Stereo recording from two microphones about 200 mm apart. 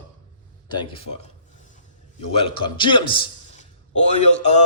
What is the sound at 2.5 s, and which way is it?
Speech, 25° left (ahead or behind).